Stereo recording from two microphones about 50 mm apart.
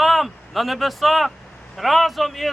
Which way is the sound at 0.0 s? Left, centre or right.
Centre.